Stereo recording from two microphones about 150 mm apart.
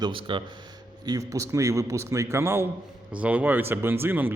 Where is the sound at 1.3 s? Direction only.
20° right (ahead or behind).